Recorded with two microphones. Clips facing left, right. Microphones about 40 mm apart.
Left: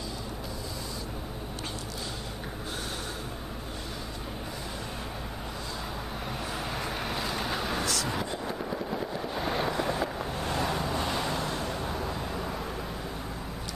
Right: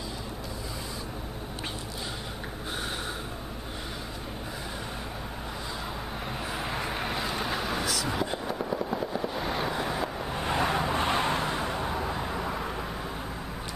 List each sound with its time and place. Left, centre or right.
6.7 s vehicle: centre
8.3 s fireworks: centre
10.3 s vehicle: right